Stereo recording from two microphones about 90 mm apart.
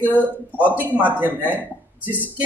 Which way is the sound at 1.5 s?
20° right (ahead or behind).